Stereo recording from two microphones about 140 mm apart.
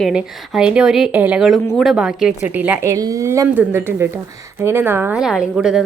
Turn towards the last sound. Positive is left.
turn(degrees=-5)  # may be behind; listen again after turning